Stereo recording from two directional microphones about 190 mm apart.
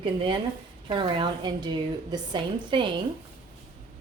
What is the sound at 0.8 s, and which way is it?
Speech, 25° right (ahead or behind).